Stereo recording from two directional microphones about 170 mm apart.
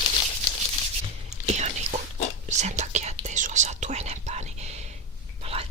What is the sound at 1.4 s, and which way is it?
Whispering, 40° right (ahead or behind).